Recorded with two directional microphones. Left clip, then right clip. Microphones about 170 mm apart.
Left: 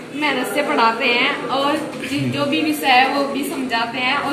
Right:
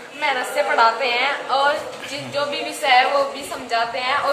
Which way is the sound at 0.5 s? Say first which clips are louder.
Right 1 dB; 10° right (ahead or behind).